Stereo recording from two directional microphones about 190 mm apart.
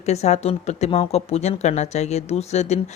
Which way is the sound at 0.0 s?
35° left (ahead or behind).